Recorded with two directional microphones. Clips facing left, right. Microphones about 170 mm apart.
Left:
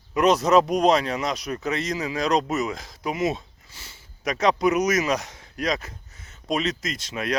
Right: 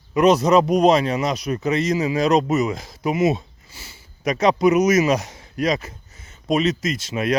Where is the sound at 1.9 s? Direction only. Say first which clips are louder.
Right 7 dB; 20° right (ahead or behind).